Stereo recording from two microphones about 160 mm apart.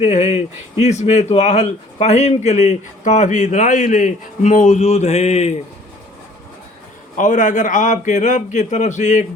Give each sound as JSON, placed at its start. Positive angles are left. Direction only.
{"t": 0.0, "sound": "speech", "side_deg": 45}
{"t": 7.2, "sound": "speech", "side_deg": 55}